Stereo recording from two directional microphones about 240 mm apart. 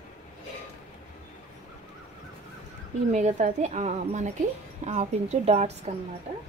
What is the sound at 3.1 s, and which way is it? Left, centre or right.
A woman's voice, right.